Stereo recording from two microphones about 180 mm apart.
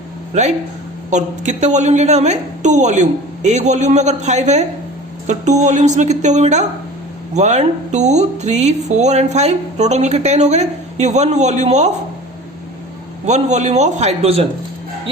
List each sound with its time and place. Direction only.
0.3 s speech: 40° right (ahead or behind)
13.2 s speech: 40° right (ahead or behind)